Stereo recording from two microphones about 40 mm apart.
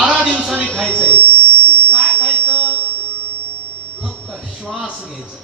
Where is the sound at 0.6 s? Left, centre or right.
Left.